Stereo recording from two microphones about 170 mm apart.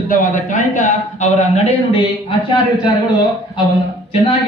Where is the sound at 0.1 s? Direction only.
50° left (ahead or behind).